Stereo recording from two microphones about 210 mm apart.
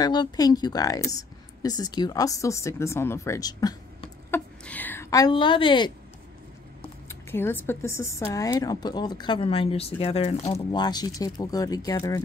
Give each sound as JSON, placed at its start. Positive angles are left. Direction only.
{"t": 0.0, "sound": "a woman's voice", "side_deg": 20}
{"t": 7.1, "sound": "speech", "side_deg": 10}